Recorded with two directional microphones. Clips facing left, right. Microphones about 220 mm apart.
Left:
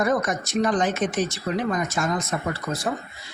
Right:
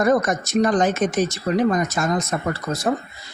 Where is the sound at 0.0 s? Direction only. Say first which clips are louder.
Right 4 dB; 45° right (ahead or behind).